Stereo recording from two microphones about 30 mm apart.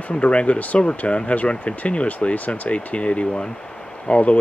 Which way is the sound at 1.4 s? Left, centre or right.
Left.